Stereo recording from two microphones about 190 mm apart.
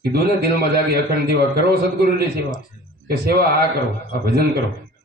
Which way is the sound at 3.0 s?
55° right (ahead or behind).